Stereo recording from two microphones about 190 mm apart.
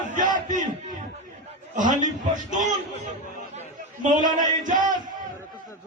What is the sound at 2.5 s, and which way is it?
Speech, 40° right (ahead or behind).